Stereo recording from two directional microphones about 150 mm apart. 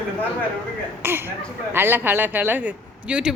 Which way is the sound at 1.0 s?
15° right (ahead or behind).